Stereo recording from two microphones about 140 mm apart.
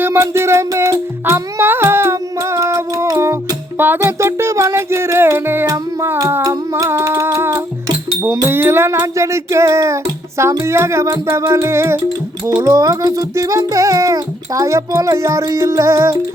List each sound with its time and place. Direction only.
0.0 s music: 15° right (ahead or behind)